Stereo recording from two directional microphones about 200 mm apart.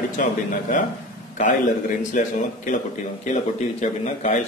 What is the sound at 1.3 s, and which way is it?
A man's voice, 40° left (ahead or behind).